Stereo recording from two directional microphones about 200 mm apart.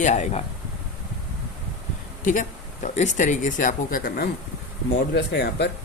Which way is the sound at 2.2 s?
40° left (ahead or behind).